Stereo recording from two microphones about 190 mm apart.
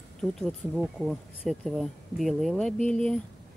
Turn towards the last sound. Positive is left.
turn(degrees=5)  # may be behind; listen again after turning